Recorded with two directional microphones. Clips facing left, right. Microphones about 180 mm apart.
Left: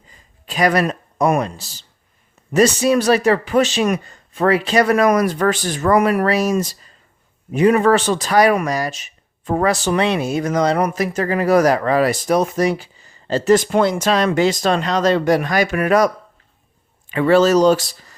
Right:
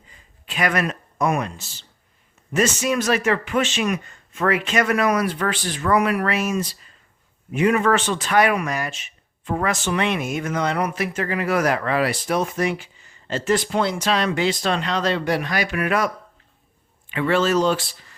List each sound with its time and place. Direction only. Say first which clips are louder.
0.4 s speech: left 6 dB; 35° left (ahead or behind)